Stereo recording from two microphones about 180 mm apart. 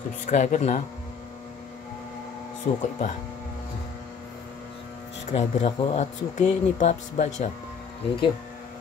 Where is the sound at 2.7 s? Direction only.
45° left (ahead or behind).